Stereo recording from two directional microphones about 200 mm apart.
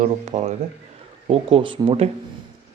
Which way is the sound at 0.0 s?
35° right (ahead or behind).